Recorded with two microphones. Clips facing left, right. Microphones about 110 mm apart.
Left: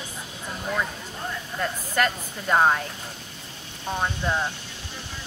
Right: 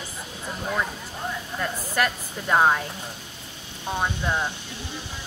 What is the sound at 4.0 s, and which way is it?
Speech, 10° right (ahead or behind).